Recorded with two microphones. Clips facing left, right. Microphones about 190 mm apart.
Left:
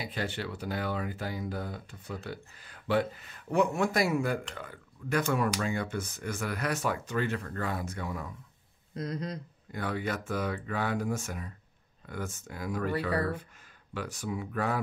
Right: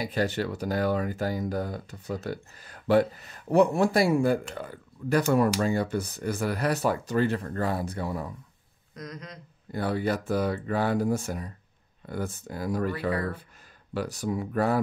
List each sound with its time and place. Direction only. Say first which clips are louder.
0.0 s speech: right 7 dB; 40° right (ahead or behind)
8.9 s speech: left 6 dB; 30° left (ahead or behind)
9.7 s speech: right 6 dB; 35° right (ahead or behind)
13.9 s speech: right 6 dB; 35° right (ahead or behind)